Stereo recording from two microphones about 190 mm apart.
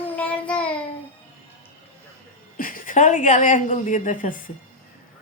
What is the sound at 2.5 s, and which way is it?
A woman's voice, 45° left (ahead or behind).